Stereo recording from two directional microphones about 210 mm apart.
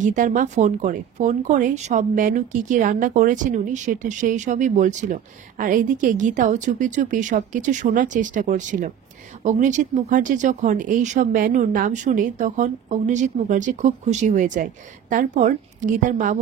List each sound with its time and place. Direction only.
0.0 s speech: 35° right (ahead or behind)